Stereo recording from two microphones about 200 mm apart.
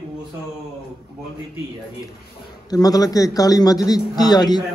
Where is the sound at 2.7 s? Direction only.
20° left (ahead or behind).